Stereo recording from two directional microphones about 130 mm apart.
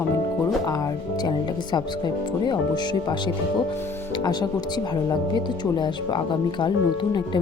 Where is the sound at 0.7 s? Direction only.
30° left (ahead or behind).